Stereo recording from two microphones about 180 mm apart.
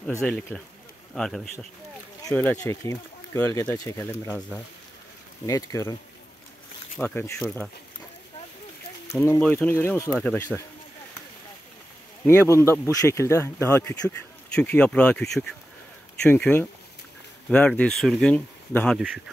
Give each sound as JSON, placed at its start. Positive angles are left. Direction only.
{"t": 0.0, "sound": "speech", "side_deg": 5}
{"t": 2.2, "sound": "speech", "side_deg": 15}
{"t": 7.0, "sound": "speech", "side_deg": 10}
{"t": 9.1, "sound": "speech", "side_deg": 15}
{"t": 12.3, "sound": "speech", "side_deg": 15}
{"t": 18.9, "sound": "speech", "side_deg": -5}